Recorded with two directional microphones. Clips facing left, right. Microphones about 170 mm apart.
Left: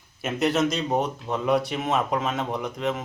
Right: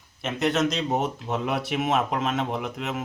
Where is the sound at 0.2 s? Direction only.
Centre (ahead or behind).